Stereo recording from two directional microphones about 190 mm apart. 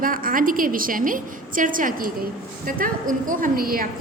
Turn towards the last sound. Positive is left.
turn(degrees=-50)  # may be behind; listen again after turning